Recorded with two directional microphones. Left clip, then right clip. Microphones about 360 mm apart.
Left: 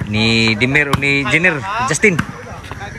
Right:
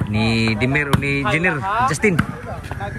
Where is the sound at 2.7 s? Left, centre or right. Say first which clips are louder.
Even; centre.